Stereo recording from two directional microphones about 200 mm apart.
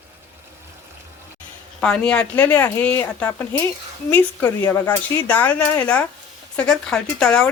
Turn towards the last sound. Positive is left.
turn(degrees=5)  # may be behind; listen again after turning